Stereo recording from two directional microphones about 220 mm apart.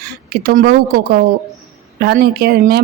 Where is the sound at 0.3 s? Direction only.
45° right (ahead or behind).